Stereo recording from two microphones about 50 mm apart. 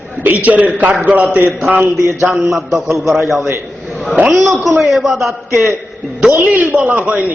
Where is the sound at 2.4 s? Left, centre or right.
Centre.